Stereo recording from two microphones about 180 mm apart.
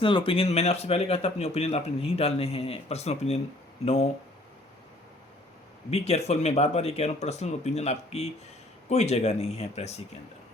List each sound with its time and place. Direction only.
0.0 s speech: 30° left (ahead or behind)
5.9 s speech: 35° left (ahead or behind)